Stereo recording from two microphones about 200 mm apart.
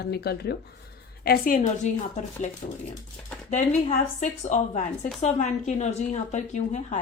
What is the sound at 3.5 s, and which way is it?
A woman's voice, 35° left (ahead or behind).